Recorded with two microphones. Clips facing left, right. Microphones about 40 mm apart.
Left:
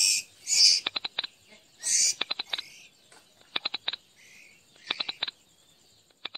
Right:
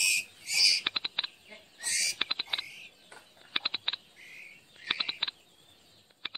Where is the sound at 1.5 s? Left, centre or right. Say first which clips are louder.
Even; right.